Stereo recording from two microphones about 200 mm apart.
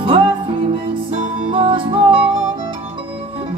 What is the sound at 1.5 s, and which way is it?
Music, 25° right (ahead or behind).